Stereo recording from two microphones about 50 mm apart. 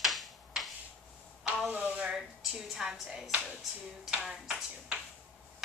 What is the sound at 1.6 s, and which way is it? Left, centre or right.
Speech, right.